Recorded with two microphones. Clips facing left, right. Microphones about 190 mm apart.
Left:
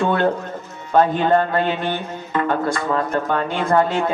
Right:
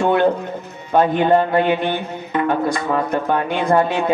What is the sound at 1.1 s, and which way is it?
Speech, 15° right (ahead or behind).